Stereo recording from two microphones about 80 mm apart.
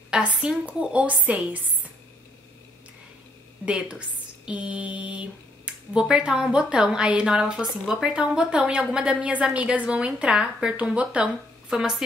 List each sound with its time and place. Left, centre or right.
0.4 s speech: centre
3.6 s a woman's voice: centre